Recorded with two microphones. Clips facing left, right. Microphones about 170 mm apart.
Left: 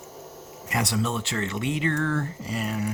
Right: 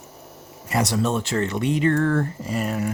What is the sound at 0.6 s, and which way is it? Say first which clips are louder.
Speech: right 5 dB; 40° right (ahead or behind).